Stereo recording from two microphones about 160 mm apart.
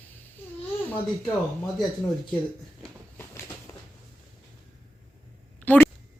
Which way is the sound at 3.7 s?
15° left (ahead or behind).